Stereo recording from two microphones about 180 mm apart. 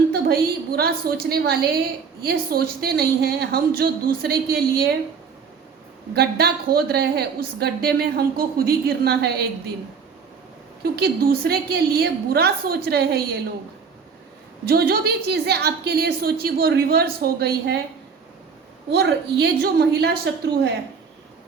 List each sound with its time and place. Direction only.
0.1 s a woman's voice: 55° right (ahead or behind)
6.1 s a woman's voice: 60° right (ahead or behind)
10.9 s a woman's voice: 60° right (ahead or behind)
14.6 s a woman's voice: 60° right (ahead or behind)
18.9 s a woman's voice: 65° right (ahead or behind)